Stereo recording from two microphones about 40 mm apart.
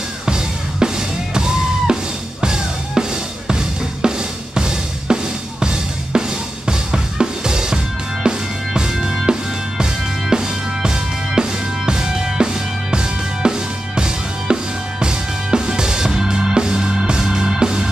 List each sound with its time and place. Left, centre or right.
0.3 s drum kit: centre
2.4 s drum: centre